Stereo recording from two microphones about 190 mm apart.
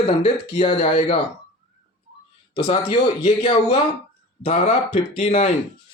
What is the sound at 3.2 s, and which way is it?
A man's voice, 35° left (ahead or behind).